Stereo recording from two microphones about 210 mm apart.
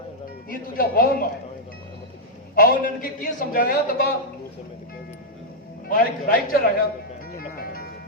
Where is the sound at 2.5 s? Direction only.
45° left (ahead or behind).